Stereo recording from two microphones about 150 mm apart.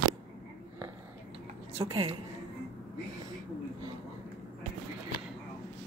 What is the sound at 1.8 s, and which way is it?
Speech, 30° right (ahead or behind).